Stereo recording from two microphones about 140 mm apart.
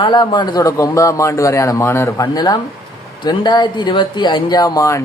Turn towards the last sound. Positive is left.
turn(degrees=25)  # may be behind; listen again after turning